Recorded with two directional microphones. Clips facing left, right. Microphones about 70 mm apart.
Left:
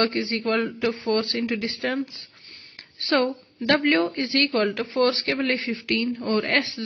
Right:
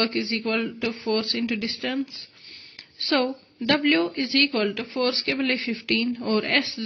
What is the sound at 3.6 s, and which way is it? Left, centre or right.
Speech, left.